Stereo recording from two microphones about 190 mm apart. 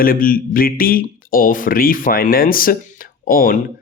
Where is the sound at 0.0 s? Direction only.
50° left (ahead or behind).